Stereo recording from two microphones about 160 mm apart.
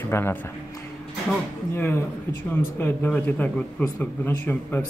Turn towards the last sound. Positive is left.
turn(degrees=10)  # may be behind; listen again after turning